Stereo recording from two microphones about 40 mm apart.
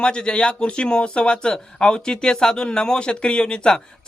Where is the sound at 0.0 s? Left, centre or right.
Left.